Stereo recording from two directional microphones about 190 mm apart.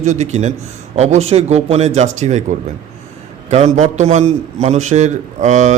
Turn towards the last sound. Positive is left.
turn(degrees=-40)  # may be behind; listen again after turning